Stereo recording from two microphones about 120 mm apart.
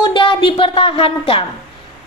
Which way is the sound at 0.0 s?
45° left (ahead or behind).